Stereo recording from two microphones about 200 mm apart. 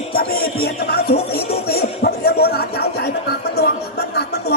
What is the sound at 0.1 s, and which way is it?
Music, 50° left (ahead or behind).